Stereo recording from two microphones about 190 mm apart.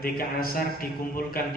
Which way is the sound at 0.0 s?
50° left (ahead or behind).